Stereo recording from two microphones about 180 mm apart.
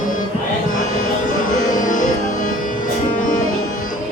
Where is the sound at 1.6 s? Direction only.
45° left (ahead or behind).